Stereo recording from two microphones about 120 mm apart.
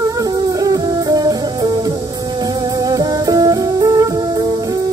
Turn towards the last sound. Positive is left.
turn(degrees=-30)  # may be behind; listen again after turning